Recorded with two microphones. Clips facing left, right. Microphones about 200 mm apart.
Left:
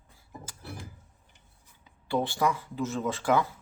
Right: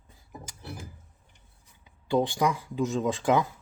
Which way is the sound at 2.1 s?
15° right (ahead or behind).